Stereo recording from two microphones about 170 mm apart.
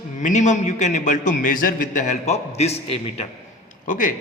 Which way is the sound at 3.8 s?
50° left (ahead or behind).